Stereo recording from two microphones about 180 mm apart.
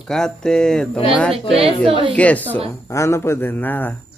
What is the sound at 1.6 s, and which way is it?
Speech, 30° right (ahead or behind).